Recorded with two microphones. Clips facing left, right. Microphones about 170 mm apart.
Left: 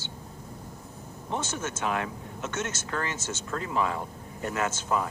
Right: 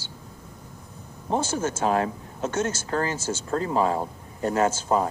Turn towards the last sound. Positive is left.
turn(degrees=-35)  # may be behind; listen again after turning